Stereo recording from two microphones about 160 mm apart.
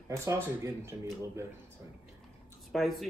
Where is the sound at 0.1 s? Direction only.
20° right (ahead or behind).